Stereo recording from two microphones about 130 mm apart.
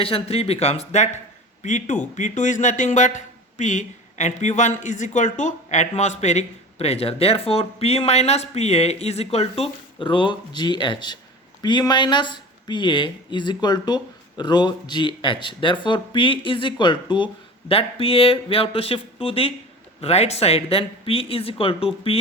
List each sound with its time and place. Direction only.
0.0 s a man's voice: 50° left (ahead or behind)